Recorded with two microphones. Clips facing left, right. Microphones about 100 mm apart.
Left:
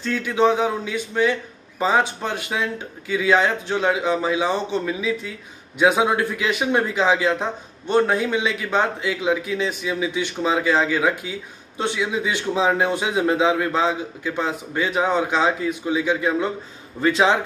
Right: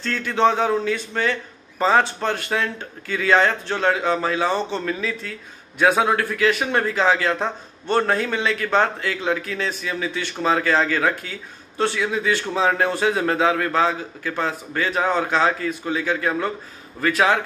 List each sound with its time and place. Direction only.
0.0 s a man's voice: 10° left (ahead or behind)